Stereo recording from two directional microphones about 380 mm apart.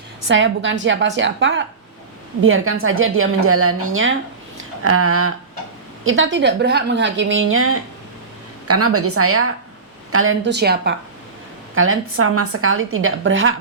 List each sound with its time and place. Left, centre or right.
0.3 s a woman's voice: right